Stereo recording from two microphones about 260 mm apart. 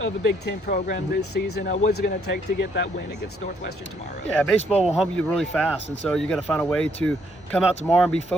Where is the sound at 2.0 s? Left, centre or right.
Left.